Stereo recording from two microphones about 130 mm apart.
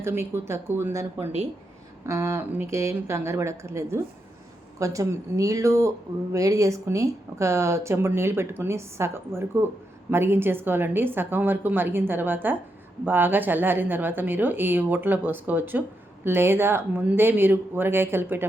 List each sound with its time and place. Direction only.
0.0 s a woman's voice: 20° right (ahead or behind)